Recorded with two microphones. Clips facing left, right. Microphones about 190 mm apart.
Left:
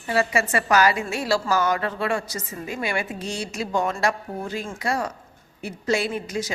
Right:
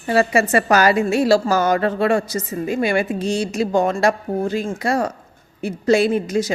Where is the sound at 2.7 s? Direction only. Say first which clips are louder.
Right 8 dB; 50° right (ahead or behind).